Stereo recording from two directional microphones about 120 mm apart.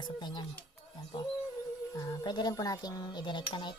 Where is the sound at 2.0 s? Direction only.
35° left (ahead or behind).